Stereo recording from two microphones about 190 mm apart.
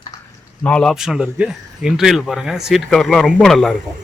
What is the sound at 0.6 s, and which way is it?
Speech, 5° left (ahead or behind).